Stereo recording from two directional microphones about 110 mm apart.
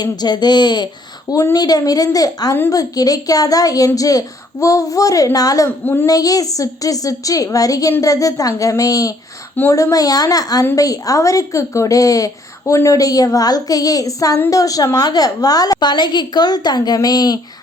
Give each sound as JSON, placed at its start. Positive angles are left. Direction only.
{"t": 0.0, "sound": "a woman's voice", "side_deg": 40}
{"t": 1.3, "sound": "a woman's voice", "side_deg": 30}
{"t": 5.8, "sound": "a woman's voice", "side_deg": 20}
{"t": 6.1, "sound": "a woman's voice", "side_deg": 35}